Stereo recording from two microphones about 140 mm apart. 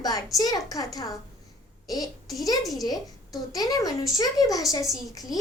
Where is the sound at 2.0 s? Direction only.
Centre (ahead or behind).